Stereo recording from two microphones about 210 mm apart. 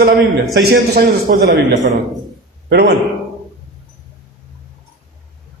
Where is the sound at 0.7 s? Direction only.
50° right (ahead or behind).